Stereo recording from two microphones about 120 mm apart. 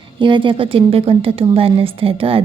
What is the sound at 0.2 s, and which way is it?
A woman's voice, 45° right (ahead or behind).